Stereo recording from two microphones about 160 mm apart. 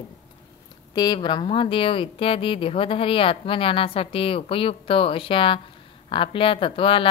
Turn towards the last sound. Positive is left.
turn(degrees=35)  # may be behind; listen again after turning